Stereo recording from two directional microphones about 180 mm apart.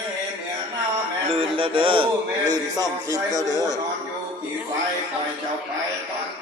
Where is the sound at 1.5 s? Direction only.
30° right (ahead or behind).